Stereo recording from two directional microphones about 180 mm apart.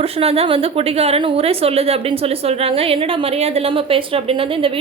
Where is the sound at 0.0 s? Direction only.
35° right (ahead or behind).